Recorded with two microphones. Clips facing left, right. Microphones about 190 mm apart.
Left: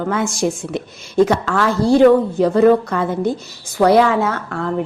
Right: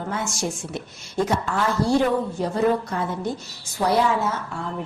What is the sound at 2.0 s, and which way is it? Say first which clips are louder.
A woman's voice: left 10 dB; 75° left (ahead or behind).